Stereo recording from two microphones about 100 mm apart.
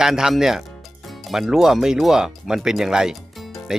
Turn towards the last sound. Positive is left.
turn(degrees=-5)  # may be behind; listen again after turning